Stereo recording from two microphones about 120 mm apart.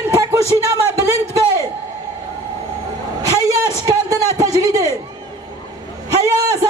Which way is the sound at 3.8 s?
30° right (ahead or behind).